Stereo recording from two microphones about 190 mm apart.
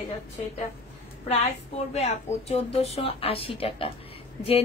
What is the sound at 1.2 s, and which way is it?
A woman's voice, 35° left (ahead or behind).